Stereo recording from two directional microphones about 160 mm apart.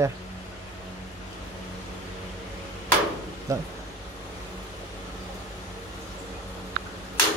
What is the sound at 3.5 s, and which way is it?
Speech, 20° right (ahead or behind).